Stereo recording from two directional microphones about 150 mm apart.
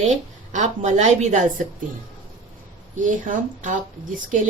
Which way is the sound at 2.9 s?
60° right (ahead or behind).